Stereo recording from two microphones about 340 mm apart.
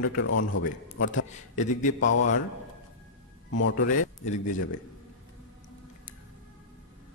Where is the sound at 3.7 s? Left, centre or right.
Left.